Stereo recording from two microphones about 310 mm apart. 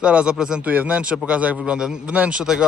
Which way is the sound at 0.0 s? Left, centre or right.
Centre.